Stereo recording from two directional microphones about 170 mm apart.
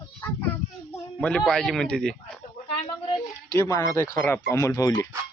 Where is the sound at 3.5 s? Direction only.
20° left (ahead or behind).